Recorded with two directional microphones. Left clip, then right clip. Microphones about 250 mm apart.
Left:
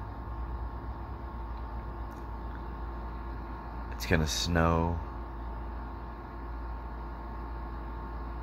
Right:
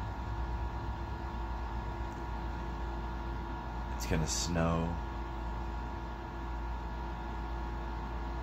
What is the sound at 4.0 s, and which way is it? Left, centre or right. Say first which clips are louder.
Speech: left 6 dB; left.